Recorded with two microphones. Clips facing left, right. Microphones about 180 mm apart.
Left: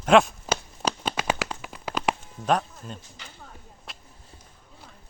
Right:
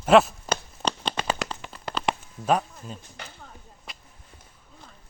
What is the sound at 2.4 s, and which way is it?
Speech, 5° right (ahead or behind).